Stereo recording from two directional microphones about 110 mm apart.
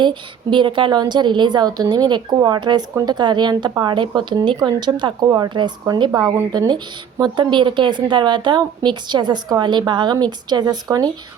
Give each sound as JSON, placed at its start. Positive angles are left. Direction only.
{"t": 0.0, "sound": "a woman's voice", "side_deg": -45}